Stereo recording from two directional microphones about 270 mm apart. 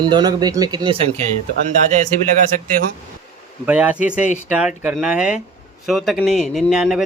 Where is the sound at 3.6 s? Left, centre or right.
Centre.